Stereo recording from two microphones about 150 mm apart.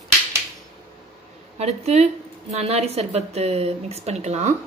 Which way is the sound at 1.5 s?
45° right (ahead or behind).